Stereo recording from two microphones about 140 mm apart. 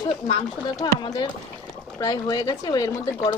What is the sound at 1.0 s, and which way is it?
Speech, 35° left (ahead or behind).